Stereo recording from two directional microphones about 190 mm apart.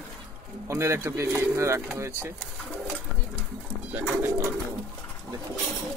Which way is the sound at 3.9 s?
10° right (ahead or behind).